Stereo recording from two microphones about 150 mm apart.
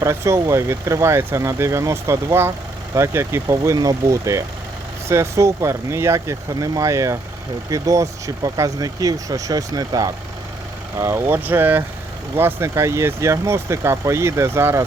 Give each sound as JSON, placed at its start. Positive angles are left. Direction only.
{"t": 0.0, "sound": "speech", "side_deg": -20}